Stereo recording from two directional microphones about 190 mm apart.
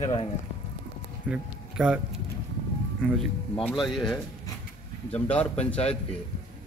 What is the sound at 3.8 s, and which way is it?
A man's voice, centre (ahead or behind).